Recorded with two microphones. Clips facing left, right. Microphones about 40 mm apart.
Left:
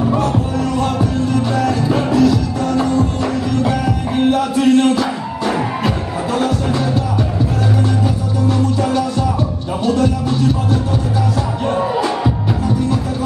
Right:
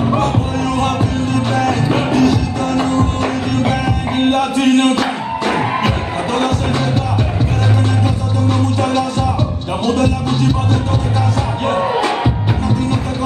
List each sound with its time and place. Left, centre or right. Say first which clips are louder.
0.7 s music: even; right
8.8 s music: right 1 dB; right